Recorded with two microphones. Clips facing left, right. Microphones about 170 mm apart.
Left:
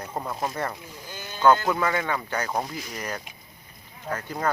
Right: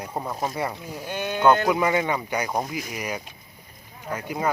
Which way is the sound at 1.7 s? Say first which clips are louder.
Right 3 dB; 15° right (ahead or behind).